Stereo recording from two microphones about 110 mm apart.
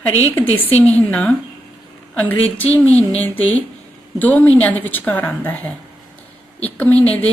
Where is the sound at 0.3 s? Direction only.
15° left (ahead or behind).